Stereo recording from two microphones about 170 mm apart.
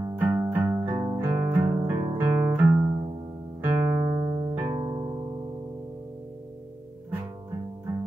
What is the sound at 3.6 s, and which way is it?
Music, 15° right (ahead or behind).